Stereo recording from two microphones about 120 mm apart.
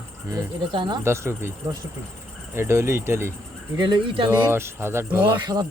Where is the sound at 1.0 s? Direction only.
20° right (ahead or behind).